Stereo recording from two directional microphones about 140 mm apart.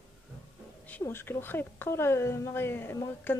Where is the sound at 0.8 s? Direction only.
15° left (ahead or behind).